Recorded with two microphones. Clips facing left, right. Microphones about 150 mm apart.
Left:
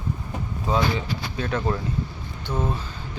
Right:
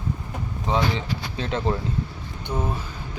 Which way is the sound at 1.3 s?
25° right (ahead or behind).